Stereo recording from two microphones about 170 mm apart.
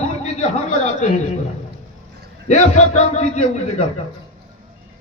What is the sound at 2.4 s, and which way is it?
A man's voice, 40° left (ahead or behind).